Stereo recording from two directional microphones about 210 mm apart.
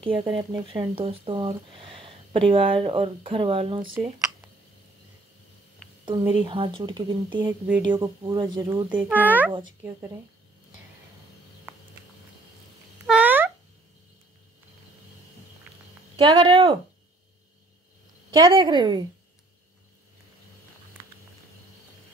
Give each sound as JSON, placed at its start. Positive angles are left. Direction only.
{"t": 0.0, "sound": "speech", "side_deg": -25}
{"t": 6.4, "sound": "speech", "side_deg": -25}
{"t": 8.8, "sound": "a child's voice", "side_deg": -5}
{"t": 13.0, "sound": "cat", "side_deg": -5}
{"t": 16.2, "sound": "speech", "side_deg": -20}
{"t": 18.3, "sound": "speech", "side_deg": -20}